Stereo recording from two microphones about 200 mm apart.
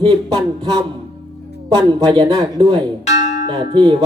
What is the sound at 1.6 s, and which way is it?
Speech, 20° right (ahead or behind).